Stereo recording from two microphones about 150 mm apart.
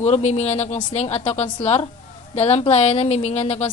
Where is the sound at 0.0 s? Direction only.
45° left (ahead or behind).